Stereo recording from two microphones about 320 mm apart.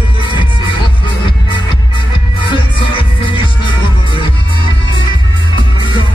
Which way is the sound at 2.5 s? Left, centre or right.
Centre.